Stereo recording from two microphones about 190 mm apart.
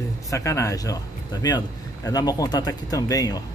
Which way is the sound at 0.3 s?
15° left (ahead or behind).